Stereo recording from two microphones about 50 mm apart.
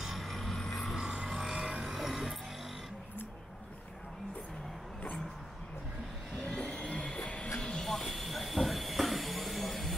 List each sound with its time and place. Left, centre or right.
0.0 s a sound: centre
0.9 s music: centre
6.4 s music: centre
7.6 s train: centre